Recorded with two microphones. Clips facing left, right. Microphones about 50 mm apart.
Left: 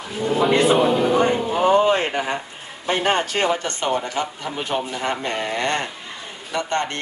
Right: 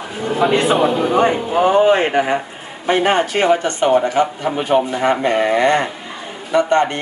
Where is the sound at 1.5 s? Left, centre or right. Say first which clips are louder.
Right 4 dB; right.